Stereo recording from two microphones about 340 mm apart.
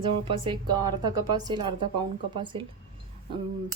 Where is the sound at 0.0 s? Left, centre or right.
Centre.